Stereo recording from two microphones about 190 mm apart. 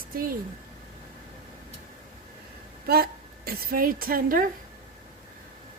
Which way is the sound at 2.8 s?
55° right (ahead or behind).